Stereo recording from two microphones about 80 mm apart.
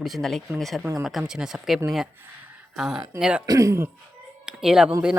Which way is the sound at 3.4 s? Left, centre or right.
Right.